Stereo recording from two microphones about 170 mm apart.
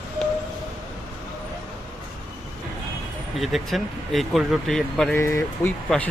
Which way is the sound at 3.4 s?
Centre (ahead or behind).